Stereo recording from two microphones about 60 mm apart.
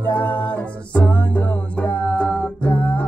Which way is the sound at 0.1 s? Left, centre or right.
Left.